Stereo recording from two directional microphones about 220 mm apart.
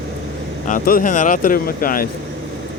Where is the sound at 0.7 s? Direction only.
40° left (ahead or behind).